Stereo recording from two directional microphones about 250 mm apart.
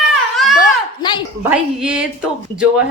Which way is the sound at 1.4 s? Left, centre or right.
Centre.